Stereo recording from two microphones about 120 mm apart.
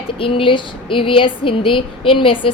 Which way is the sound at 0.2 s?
50° left (ahead or behind).